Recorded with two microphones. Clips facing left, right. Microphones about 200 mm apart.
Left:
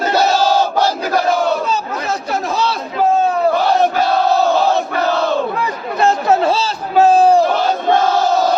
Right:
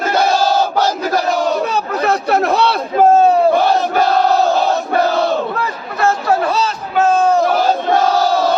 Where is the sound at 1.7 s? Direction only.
60° right (ahead or behind).